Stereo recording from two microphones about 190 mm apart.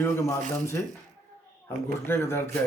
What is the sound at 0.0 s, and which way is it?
Speech, 15° left (ahead or behind).